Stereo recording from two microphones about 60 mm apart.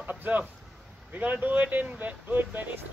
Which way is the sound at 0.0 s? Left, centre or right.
Right.